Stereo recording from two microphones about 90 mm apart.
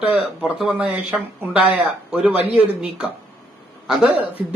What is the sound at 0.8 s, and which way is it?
Speech, 15° right (ahead or behind).